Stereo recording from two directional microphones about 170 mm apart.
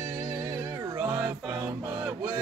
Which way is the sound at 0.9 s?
20° right (ahead or behind).